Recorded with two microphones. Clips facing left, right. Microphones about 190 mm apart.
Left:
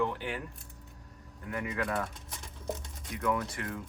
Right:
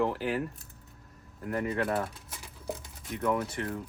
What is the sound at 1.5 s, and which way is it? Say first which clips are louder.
Speech: right 4 dB; 35° right (ahead or behind).